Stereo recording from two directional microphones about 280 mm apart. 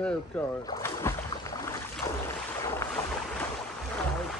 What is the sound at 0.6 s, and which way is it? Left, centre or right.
Boat, centre.